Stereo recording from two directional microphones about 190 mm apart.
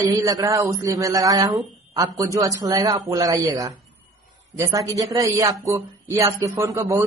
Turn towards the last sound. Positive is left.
turn(degrees=-15)  # may be behind; listen again after turning